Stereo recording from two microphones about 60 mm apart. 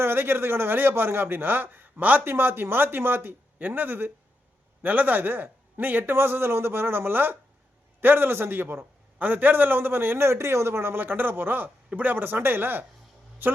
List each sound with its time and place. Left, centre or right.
0.0 s a man's voice: right
2.2 s a man's voice: right